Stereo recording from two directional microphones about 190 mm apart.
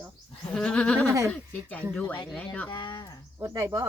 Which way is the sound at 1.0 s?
15° right (ahead or behind).